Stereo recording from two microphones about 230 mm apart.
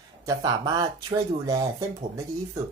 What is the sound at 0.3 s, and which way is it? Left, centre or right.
Speech, centre.